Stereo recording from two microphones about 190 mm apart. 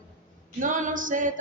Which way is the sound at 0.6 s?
45° right (ahead or behind).